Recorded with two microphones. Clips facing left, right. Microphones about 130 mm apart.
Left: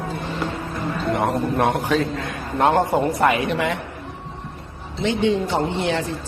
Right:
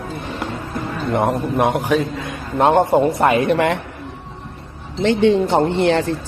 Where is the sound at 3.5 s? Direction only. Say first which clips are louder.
Right 6 dB; 60° right (ahead or behind).